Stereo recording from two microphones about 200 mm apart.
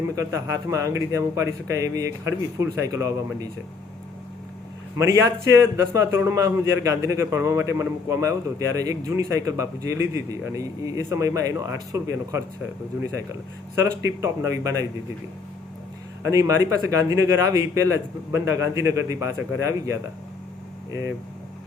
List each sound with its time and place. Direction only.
0.2 s a man's voice: 15° right (ahead or behind)
4.9 s a man's voice: 15° right (ahead or behind)
14.2 s a man's voice: 15° right (ahead or behind)
16.2 s a man's voice: 15° right (ahead or behind)